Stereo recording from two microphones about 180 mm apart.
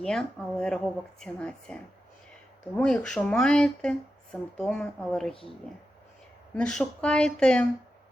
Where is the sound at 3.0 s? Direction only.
5° left (ahead or behind).